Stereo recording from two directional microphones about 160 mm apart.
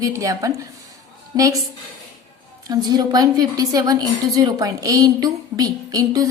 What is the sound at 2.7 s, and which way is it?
A woman's voice, 25° right (ahead or behind).